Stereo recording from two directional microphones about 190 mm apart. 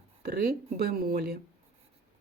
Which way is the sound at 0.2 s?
55° right (ahead or behind).